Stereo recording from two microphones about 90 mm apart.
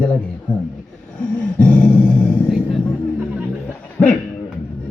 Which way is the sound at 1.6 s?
15° left (ahead or behind).